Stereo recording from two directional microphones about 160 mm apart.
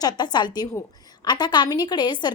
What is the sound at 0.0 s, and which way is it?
A woman's voice, 25° left (ahead or behind).